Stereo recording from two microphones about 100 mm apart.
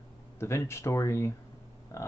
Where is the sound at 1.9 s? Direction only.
30° left (ahead or behind).